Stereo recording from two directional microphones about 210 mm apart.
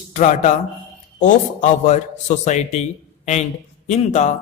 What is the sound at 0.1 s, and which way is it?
Speech, 35° left (ahead or behind).